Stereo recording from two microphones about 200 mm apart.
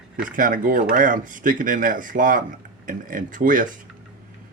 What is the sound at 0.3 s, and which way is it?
Speech, 40° right (ahead or behind).